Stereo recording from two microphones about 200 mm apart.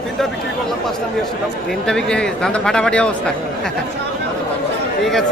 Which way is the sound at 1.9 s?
5° left (ahead or behind).